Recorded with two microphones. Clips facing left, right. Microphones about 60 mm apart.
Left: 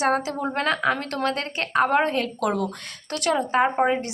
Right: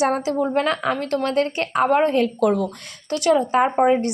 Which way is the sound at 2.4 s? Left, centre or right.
Left.